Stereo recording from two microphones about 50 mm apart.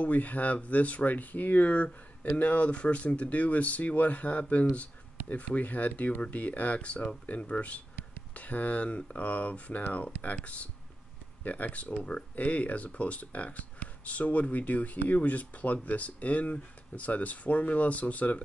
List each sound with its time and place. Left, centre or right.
0.0 s speech: left